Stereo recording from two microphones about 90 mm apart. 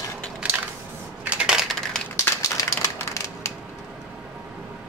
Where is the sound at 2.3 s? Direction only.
30° left (ahead or behind).